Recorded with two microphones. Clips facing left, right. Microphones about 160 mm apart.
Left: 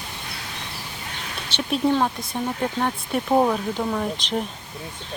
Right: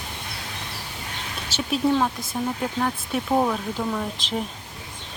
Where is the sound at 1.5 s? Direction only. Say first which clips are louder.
Left 1 dB; centre (ahead or behind).